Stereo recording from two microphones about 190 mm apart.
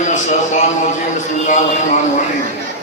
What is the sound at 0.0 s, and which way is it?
Speech, 40° left (ahead or behind).